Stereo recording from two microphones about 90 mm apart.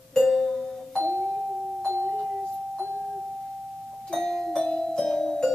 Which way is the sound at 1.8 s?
25° right (ahead or behind).